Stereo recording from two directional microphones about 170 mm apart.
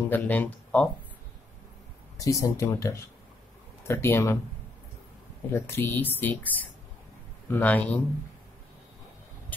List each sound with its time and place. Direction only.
0.1 s speech: 10° left (ahead or behind)
2.1 s speech: 20° left (ahead or behind)
5.5 s speech: 15° left (ahead or behind)